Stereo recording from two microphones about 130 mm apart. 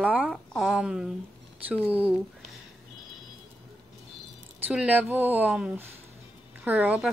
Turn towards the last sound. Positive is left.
turn(degrees=-10)  # may be behind; listen again after turning